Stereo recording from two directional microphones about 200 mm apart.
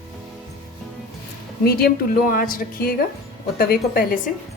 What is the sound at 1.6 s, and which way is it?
A woman's voice, 50° left (ahead or behind).